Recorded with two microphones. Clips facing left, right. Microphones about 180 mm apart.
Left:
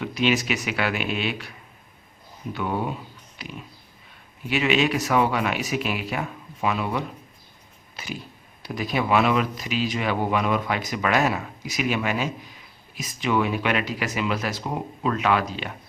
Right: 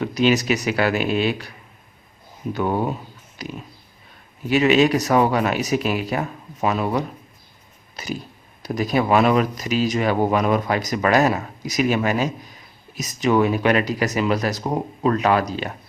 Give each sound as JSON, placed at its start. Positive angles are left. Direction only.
{"t": 0.0, "sound": "speech", "side_deg": -40}
{"t": 7.9, "sound": "a sound", "side_deg": -40}
{"t": 8.6, "sound": "speech", "side_deg": -40}